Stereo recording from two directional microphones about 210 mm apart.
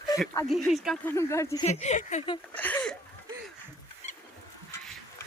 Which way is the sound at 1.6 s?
35° left (ahead or behind).